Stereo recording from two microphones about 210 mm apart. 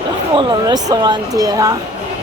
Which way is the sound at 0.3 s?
20° right (ahead or behind).